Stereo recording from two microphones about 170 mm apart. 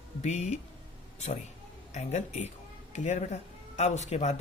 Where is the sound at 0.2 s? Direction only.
45° left (ahead or behind).